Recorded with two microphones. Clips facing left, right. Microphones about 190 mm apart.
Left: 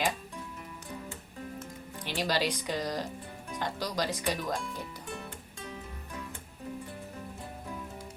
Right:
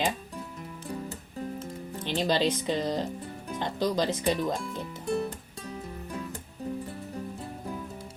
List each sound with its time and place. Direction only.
1.5 s music: 25° right (ahead or behind)
3.6 s speech: 25° right (ahead or behind)
5.0 s music: 35° right (ahead or behind)